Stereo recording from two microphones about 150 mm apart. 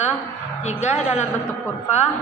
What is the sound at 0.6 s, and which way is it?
Speech, 50° left (ahead or behind).